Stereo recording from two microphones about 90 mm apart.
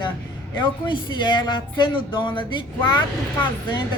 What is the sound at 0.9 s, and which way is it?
Speech, 60° left (ahead or behind).